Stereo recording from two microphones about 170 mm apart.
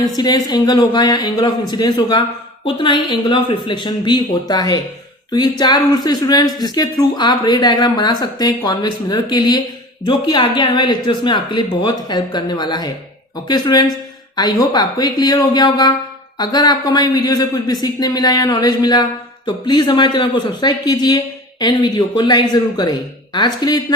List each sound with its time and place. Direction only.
0.2 s speech: 25° left (ahead or behind)